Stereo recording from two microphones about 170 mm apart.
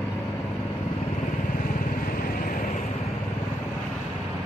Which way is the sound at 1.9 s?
55° left (ahead or behind).